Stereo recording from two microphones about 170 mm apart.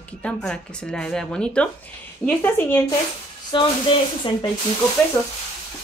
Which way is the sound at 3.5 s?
25° left (ahead or behind).